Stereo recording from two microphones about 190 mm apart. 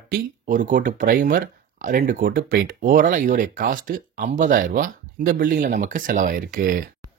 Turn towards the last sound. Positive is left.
turn(degrees=-45)  # may be behind; listen again after turning